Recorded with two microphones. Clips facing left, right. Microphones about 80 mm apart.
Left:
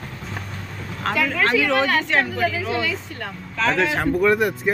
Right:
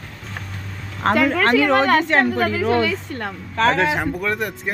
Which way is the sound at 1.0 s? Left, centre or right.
Right.